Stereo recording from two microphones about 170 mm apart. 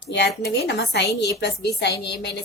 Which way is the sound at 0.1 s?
75° left (ahead or behind).